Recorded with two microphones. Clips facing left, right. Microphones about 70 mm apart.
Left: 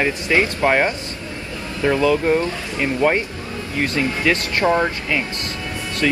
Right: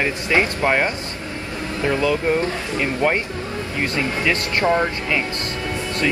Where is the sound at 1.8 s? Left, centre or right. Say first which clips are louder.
Left 3 dB; left.